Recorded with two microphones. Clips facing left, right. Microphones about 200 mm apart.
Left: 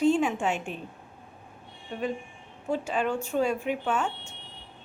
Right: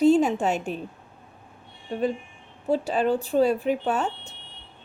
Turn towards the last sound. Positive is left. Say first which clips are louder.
# right 3 dB
turn(degrees=-35)  # may be behind; listen again after turning